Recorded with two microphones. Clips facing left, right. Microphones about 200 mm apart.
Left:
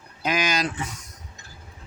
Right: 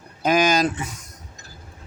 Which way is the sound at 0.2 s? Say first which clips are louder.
Right 7 dB; 45° right (ahead or behind).